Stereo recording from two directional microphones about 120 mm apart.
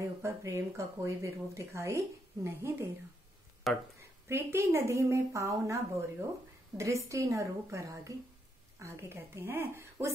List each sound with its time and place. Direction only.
0.2 s speech: 20° right (ahead or behind)
3.7 s speech: centre (ahead or behind)
4.3 s speech: 20° right (ahead or behind)